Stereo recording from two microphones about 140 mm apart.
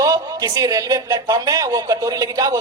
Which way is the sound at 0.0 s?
25° right (ahead or behind).